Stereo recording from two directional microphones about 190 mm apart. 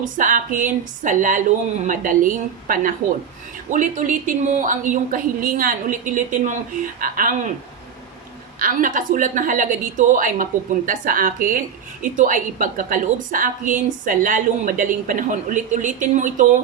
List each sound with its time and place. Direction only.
0.0 s a woman's voice: 45° right (ahead or behind)
8.5 s a woman's voice: 45° right (ahead or behind)